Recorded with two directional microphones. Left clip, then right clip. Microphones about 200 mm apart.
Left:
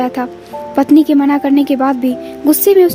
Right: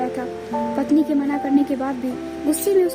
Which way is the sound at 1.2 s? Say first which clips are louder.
Left 8 dB; 50° left (ahead or behind).